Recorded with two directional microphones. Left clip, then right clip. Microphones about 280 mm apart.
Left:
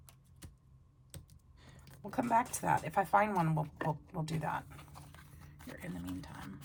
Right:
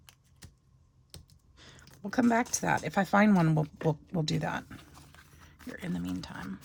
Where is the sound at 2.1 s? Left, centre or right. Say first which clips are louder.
Right 4 dB; right.